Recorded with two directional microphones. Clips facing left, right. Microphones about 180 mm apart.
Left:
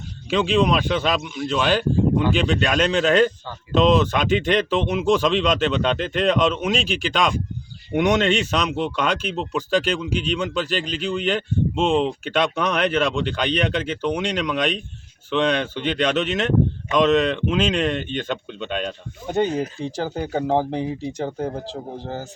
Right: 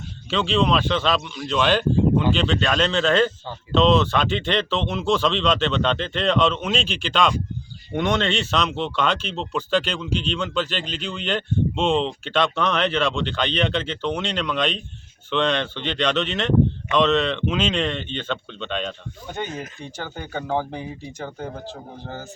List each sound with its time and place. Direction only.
0.3 s speech: 10° left (ahead or behind)
19.3 s speech: 35° left (ahead or behind)